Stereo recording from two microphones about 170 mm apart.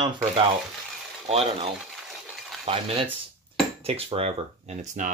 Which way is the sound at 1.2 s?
35° right (ahead or behind).